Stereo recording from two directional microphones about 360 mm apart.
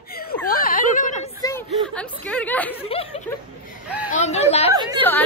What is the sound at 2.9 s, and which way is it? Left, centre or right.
Speech, centre.